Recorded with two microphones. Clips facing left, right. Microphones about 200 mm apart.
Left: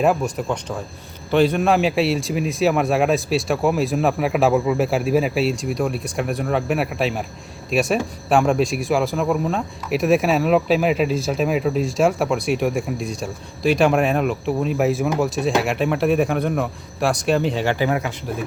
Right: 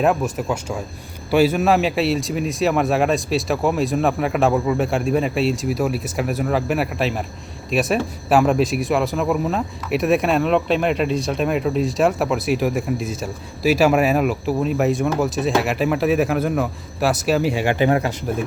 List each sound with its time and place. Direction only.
0.0 s speech: centre (ahead or behind)
17.8 s speech: 30° right (ahead or behind)